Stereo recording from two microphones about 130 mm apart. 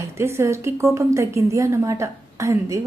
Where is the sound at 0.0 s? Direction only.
20° right (ahead or behind).